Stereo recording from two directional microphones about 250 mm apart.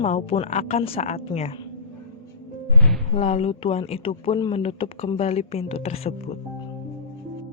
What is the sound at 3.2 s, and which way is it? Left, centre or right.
Speech, left.